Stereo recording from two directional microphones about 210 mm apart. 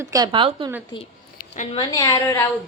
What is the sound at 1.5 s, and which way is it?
Speech, 35° left (ahead or behind).